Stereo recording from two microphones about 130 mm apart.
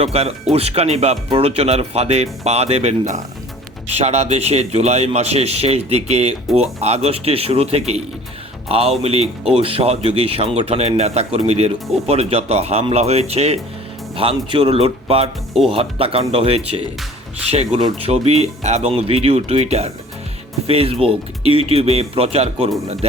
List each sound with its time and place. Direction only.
0.0 s speech: 50° right (ahead or behind)